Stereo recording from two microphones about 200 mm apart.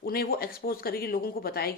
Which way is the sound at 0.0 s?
50° left (ahead or behind).